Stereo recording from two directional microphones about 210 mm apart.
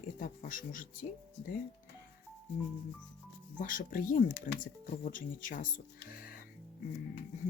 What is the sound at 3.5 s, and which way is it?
Speech, 40° left (ahead or behind).